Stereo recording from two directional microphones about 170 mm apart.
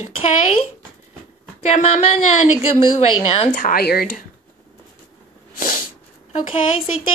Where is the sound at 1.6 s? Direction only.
40° left (ahead or behind).